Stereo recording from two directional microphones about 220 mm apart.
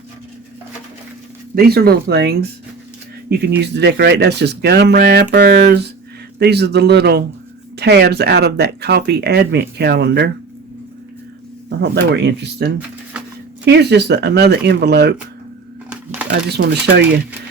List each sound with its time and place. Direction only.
1.5 s speech: 45° right (ahead or behind)
3.6 s speech: 50° right (ahead or behind)
11.8 s speech: 50° right (ahead or behind)
16.3 s speech: 50° right (ahead or behind)